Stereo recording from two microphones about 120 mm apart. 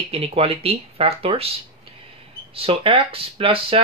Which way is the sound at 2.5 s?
55° right (ahead or behind).